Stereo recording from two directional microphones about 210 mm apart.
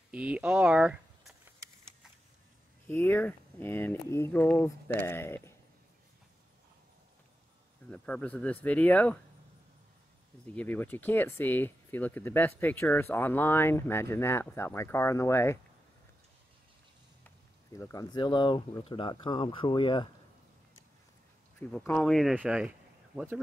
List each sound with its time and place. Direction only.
0.1 s a sound: 5° right (ahead or behind)
2.9 s speech: 10° left (ahead or behind)
7.9 s speech: 5° left (ahead or behind)
10.4 s speech: 5° left (ahead or behind)
17.7 s speech: 15° left (ahead or behind)
21.5 s speech: 5° left (ahead or behind)